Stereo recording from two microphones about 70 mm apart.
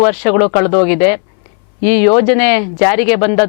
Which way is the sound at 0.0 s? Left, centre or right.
Centre.